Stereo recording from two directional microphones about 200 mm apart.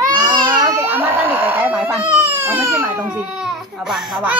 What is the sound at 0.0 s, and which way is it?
Baby cry, 20° right (ahead or behind).